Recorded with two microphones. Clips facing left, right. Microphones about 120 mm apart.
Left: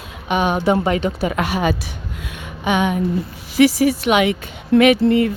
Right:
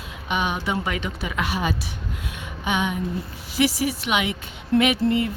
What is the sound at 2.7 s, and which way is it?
Speech, 65° left (ahead or behind).